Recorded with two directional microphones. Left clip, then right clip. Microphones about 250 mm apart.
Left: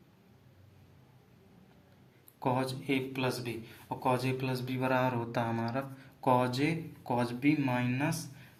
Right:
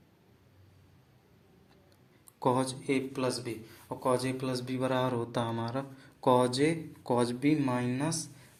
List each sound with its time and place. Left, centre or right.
2.4 s speech: right